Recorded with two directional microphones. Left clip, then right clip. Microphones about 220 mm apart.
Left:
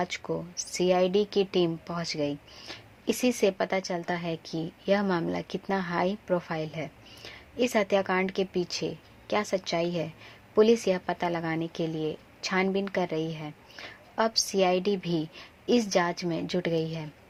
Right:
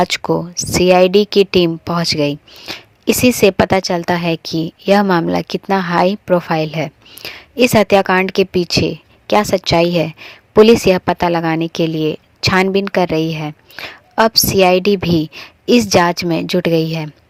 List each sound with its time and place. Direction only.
0.0 s speech: 35° right (ahead or behind)